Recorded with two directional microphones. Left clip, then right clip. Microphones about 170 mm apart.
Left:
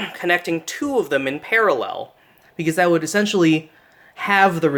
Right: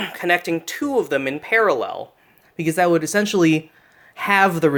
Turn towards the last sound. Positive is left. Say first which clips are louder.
# even
turn(degrees=-30)  # may be behind; listen again after turning